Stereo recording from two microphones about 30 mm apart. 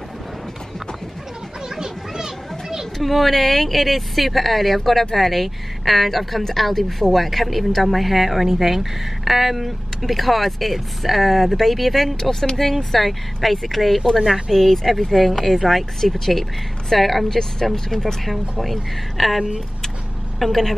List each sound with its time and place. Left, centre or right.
1.8 s children playing: centre
3.0 s speech: centre
12.2 s speech: centre
14.5 s speech: centre
17.3 s speech: centre
18.2 s a woman's voice: centre